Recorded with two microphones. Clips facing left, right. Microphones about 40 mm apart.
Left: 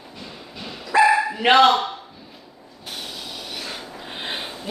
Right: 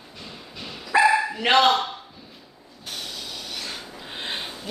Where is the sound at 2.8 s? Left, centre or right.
Centre.